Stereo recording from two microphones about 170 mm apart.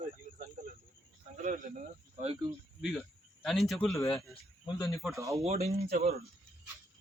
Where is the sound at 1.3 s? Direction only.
45° right (ahead or behind).